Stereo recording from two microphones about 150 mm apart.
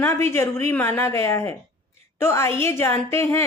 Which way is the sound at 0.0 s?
15° left (ahead or behind).